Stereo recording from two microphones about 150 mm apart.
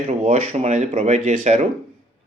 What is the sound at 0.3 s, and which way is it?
A man's voice, 50° right (ahead or behind).